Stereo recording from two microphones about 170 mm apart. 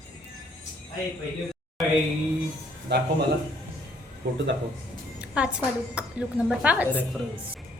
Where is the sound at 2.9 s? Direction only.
80° right.